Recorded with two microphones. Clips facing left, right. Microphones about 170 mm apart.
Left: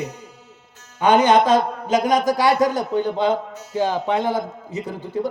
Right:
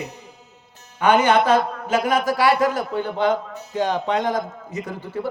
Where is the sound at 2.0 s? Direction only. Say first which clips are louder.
Left 1 dB; 20° left (ahead or behind).